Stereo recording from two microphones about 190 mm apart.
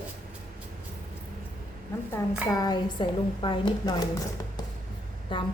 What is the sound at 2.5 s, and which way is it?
Speech, 20° left (ahead or behind).